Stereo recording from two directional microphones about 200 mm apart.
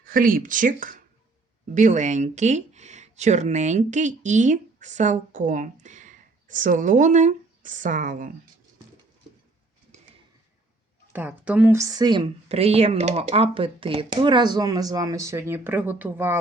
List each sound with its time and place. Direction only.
0.0 s speech: 45° right (ahead or behind)
11.1 s a woman's voice: 10° right (ahead or behind)